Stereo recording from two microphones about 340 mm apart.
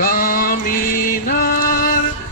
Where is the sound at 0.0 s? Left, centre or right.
Left.